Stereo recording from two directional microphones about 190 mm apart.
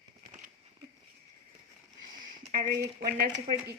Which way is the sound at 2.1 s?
50° right (ahead or behind).